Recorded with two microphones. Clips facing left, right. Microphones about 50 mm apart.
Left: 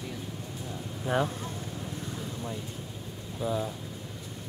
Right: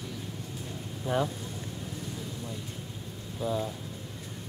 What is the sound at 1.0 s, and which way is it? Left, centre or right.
Speech, centre.